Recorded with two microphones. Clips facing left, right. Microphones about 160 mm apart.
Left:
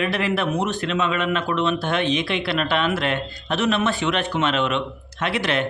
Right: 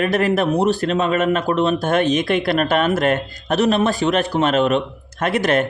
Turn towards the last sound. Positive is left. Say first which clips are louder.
# right 5 dB
turn(degrees=-45)  # may be behind; listen again after turning